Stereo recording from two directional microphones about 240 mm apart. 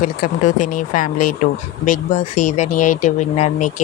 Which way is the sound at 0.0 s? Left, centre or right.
Left.